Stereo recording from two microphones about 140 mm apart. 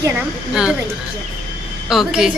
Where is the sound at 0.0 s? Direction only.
15° right (ahead or behind).